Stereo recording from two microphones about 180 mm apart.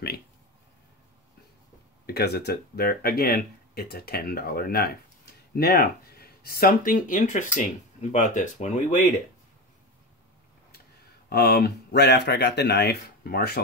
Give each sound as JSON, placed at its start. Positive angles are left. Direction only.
{"t": 2.0, "sound": "speech", "side_deg": 65}
{"t": 11.2, "sound": "speech", "side_deg": 60}